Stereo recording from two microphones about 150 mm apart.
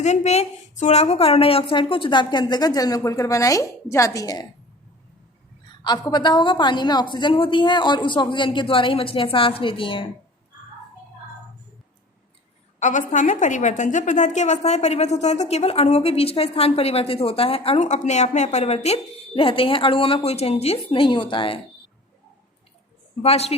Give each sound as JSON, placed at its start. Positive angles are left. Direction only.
{"t": 0.0, "sound": "a woman's voice", "side_deg": 50}
{"t": 5.8, "sound": "a woman's voice", "side_deg": 30}
{"t": 12.8, "sound": "a woman's voice", "side_deg": 55}
{"t": 23.2, "sound": "a woman's voice", "side_deg": 45}